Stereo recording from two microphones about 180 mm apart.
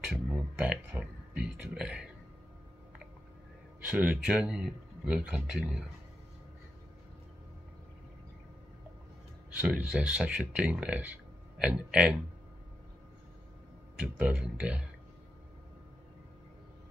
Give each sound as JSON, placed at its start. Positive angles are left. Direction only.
{"t": 0.1, "sound": "speech", "side_deg": -5}
{"t": 3.9, "sound": "speech", "side_deg": -5}
{"t": 9.6, "sound": "speech", "side_deg": -5}
{"t": 14.0, "sound": "speech", "side_deg": -5}